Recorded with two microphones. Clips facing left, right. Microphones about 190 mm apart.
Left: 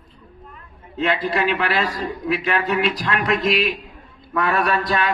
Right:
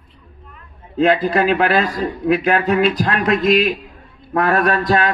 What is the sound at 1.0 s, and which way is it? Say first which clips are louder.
A man's voice: right 5 dB; 50° right (ahead or behind).